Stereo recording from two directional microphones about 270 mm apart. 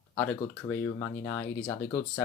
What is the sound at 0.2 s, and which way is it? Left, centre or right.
Speech, centre.